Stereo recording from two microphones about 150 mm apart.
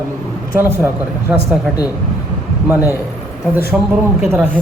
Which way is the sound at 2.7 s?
10° right (ahead or behind).